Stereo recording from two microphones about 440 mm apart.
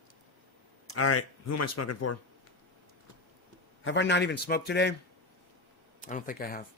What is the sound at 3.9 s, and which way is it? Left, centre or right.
Speech, left.